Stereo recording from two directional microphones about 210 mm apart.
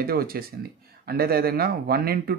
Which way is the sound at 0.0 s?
45° right (ahead or behind).